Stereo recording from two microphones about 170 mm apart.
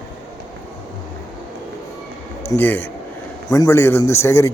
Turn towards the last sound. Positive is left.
turn(degrees=15)  # may be behind; listen again after turning